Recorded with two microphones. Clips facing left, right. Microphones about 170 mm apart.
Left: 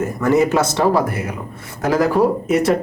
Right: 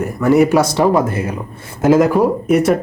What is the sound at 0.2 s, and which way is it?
Speech, 15° right (ahead or behind).